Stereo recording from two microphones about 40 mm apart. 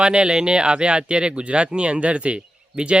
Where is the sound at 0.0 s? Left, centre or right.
Right.